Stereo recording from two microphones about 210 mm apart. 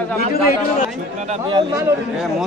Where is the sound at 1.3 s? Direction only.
20° right (ahead or behind).